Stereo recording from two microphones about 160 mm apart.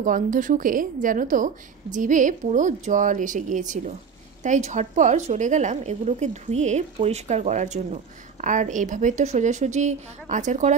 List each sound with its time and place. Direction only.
0.0 s a woman's voice: 55° right (ahead or behind)